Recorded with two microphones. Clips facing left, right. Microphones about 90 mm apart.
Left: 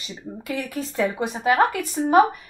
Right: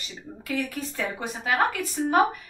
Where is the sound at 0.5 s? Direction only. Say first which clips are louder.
Left 1 dB; 15° left (ahead or behind).